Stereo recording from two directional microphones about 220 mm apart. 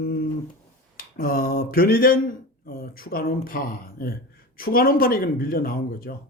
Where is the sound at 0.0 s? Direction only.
45° left (ahead or behind).